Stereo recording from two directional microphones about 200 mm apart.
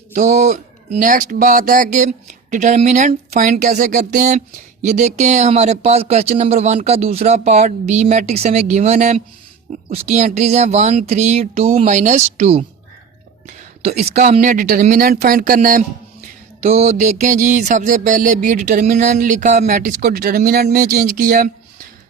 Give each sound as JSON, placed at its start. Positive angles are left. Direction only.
{"t": 0.1, "sound": "speech", "side_deg": -35}
{"t": 16.6, "sound": "speech", "side_deg": -35}